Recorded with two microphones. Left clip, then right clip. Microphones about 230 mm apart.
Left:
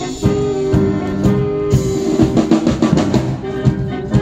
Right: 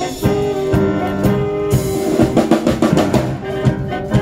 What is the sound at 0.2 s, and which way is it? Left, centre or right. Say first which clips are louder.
Music: left 1 dB; right.